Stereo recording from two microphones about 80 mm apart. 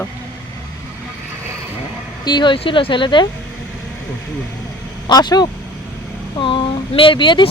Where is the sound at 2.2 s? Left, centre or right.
Left.